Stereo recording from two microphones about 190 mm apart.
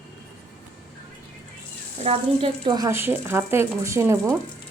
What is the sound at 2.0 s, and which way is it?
Speech, 30° right (ahead or behind).